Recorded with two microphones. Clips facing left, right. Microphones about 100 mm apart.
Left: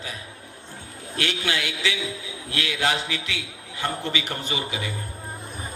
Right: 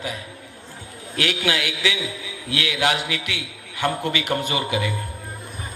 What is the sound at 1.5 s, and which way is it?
A man's voice, 30° left (ahead or behind).